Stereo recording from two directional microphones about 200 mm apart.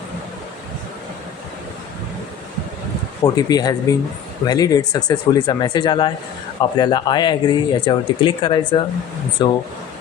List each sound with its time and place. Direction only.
3.2 s speech: 20° left (ahead or behind)